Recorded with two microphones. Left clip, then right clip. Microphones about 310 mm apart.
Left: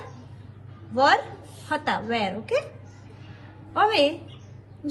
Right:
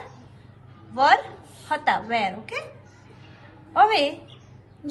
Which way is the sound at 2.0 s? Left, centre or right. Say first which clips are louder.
Right 2 dB; right.